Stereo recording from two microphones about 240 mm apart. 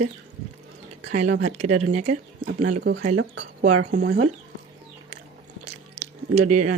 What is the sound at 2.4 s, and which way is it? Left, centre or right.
Speech, right.